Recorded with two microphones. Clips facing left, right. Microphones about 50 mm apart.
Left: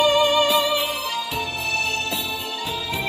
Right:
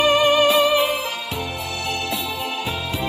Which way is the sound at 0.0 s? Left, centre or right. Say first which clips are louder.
Right 2 dB; right.